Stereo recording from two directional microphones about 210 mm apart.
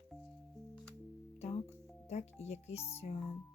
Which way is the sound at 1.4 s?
30° left (ahead or behind).